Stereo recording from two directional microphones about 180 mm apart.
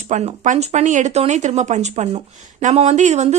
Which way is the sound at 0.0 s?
40° right (ahead or behind).